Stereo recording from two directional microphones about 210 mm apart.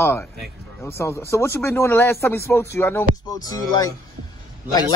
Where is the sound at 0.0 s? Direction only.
10° left (ahead or behind).